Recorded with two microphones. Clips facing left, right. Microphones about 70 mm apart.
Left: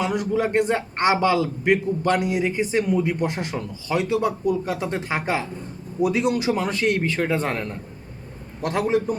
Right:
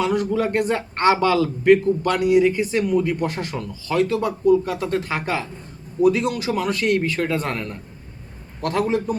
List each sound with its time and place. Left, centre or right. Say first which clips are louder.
0.0 s a man's voice: right 2 dB; centre